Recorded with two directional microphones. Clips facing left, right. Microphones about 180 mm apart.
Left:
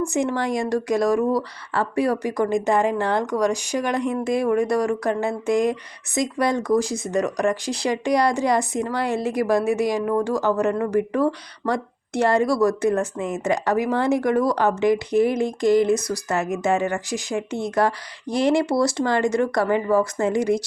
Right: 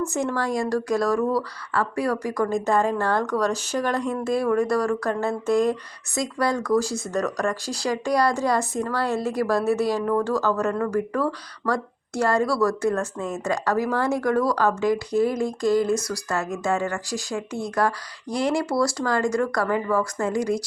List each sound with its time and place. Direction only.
0.1 s speech: 15° left (ahead or behind)